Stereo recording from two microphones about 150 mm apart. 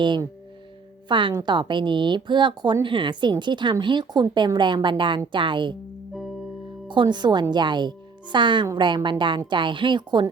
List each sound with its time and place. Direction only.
0.0 s speech: 30° right (ahead or behind)
6.8 s a woman's voice: 30° right (ahead or behind)